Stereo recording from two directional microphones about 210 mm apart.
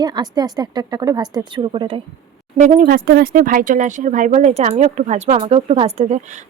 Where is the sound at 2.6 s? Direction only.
35° right (ahead or behind).